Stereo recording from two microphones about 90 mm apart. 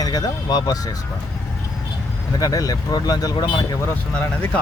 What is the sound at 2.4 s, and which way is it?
Speech, 40° left (ahead or behind).